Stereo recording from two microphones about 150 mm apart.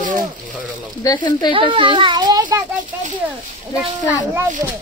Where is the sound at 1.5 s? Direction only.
35° right (ahead or behind).